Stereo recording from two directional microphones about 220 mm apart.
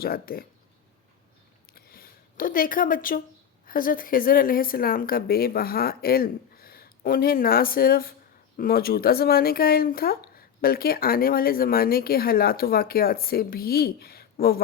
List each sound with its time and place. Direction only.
0.0 s speech: 45° left (ahead or behind)
1.7 s a sound: 45° left (ahead or behind)
3.7 s speech: 40° left (ahead or behind)